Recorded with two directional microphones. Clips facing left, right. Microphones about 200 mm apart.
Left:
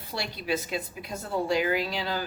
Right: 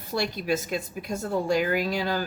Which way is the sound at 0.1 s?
45° right (ahead or behind).